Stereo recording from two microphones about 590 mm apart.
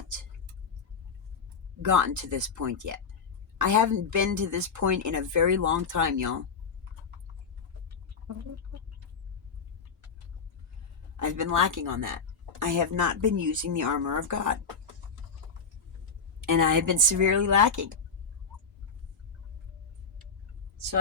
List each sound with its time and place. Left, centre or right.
1.8 s speech: right
7.9 s bird: right
11.2 s speech: right
16.4 s speech: right